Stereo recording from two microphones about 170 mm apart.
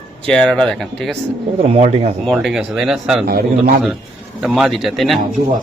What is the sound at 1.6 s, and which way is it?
Speech, 40° right (ahead or behind).